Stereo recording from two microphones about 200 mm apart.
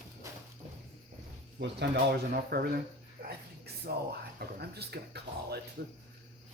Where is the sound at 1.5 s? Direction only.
55° right (ahead or behind).